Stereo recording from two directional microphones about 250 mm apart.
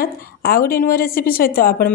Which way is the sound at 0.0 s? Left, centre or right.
Left.